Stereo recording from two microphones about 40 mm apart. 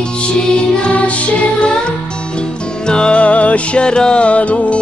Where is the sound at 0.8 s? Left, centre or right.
Left.